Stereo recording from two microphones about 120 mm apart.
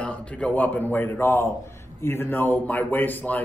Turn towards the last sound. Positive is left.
turn(degrees=15)  # may be behind; listen again after turning